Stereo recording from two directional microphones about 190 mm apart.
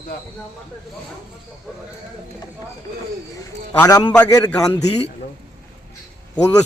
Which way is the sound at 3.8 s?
20° left (ahead or behind).